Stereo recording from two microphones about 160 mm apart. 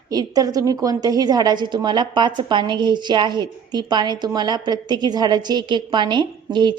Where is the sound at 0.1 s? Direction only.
25° right (ahead or behind).